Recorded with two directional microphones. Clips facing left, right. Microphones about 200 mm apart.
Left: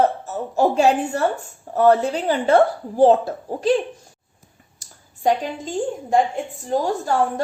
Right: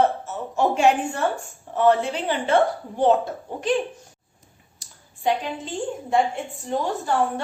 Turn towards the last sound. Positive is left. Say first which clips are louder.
# left 2 dB
turn(degrees=35)  # may be behind; listen again after turning